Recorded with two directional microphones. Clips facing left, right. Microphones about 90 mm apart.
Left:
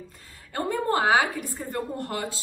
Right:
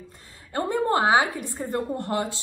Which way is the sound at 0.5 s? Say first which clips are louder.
Right 2 dB; 25° right (ahead or behind).